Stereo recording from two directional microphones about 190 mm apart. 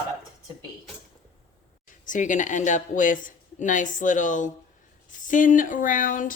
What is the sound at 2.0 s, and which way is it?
Speech, 45° left (ahead or behind).